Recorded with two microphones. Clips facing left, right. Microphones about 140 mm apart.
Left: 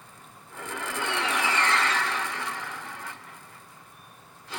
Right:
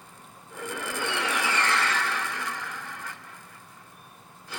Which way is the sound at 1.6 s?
25° left (ahead or behind).